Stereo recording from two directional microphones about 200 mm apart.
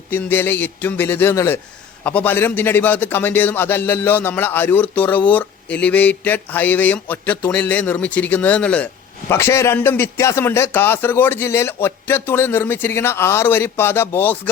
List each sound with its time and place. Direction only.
0.1 s speech: 10° left (ahead or behind)